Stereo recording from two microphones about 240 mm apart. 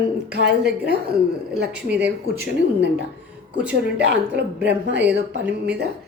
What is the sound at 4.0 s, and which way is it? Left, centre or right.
A woman's voice, right.